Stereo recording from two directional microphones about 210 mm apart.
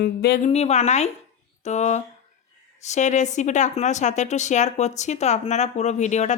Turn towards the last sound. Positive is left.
turn(degrees=35)  # may be behind; listen again after turning